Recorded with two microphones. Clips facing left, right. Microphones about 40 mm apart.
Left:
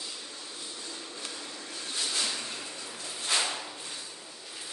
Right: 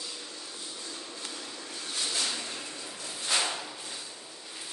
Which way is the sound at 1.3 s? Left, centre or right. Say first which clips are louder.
Even; centre.